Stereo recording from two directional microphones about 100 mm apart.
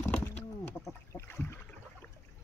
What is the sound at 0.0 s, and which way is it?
Bird, 25° left (ahead or behind).